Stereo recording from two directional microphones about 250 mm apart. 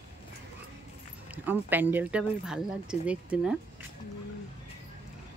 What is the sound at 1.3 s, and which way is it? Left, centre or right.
Speech, centre.